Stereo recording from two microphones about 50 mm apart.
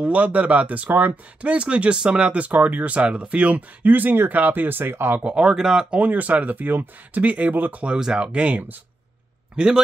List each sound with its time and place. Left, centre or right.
0.0 s speech: right
5.2 s speech: centre
5.9 s speech: right
7.8 s speech: centre
8.3 s speech: right
9.6 s speech: centre